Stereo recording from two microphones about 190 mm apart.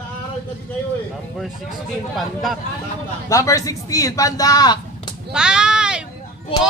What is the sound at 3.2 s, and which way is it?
Speech, 15° left (ahead or behind).